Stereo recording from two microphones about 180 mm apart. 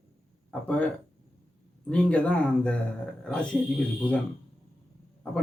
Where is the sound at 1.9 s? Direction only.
5° left (ahead or behind).